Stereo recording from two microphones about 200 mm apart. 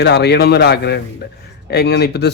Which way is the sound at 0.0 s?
55° left (ahead or behind).